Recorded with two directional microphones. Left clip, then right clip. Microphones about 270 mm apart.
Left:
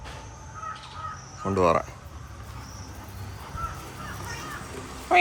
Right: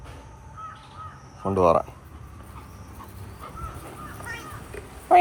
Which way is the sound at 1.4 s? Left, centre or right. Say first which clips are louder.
Right 3 dB; centre.